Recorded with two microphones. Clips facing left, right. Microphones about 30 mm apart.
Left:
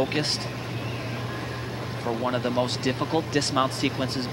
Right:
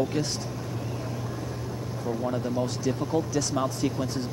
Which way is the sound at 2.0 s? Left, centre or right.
Left.